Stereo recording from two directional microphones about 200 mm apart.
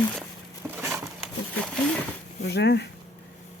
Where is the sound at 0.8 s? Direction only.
10° right (ahead or behind).